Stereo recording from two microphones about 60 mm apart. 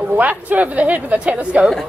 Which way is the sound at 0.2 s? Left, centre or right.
Right.